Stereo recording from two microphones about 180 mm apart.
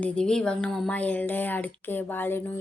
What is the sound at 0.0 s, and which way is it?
A woman's voice, 5° left (ahead or behind).